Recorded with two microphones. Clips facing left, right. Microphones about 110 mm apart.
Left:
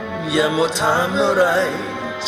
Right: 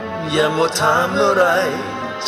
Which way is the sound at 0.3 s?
5° left (ahead or behind).